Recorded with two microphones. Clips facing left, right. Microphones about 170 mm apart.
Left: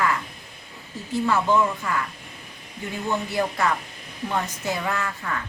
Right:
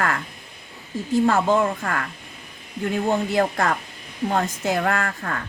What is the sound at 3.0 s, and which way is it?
A woman's voice, 50° right (ahead or behind).